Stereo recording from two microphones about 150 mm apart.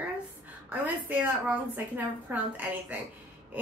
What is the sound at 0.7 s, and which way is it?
Speech, 10° right (ahead or behind).